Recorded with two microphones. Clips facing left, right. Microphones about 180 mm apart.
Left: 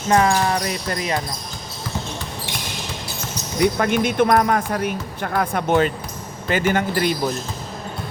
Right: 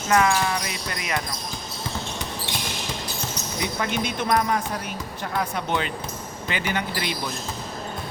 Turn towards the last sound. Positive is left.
turn(degrees=45)  # may be behind; listen again after turning